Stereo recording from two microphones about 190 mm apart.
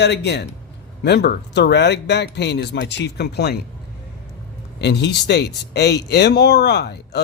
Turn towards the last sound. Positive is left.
turn(degrees=60)  # may be behind; listen again after turning